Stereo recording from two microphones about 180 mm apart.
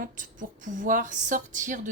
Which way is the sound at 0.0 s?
45° right (ahead or behind).